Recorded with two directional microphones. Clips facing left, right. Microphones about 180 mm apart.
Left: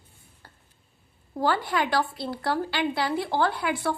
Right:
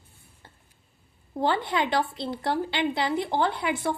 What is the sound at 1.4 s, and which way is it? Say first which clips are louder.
A woman's voice: even; 20° right (ahead or behind).